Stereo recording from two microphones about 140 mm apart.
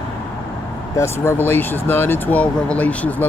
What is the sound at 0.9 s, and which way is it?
Speech, 20° left (ahead or behind).